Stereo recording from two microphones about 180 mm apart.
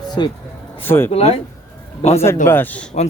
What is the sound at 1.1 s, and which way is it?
Speech, 35° left (ahead or behind).